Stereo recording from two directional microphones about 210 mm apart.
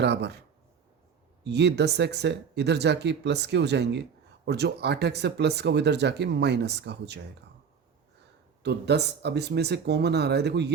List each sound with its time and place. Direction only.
0.0 s speech: 55° right (ahead or behind)
1.5 s speech: 55° right (ahead or behind)
8.6 s speech: 50° right (ahead or behind)